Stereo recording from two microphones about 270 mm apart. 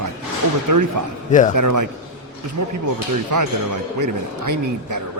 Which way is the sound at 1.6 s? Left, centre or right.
Right.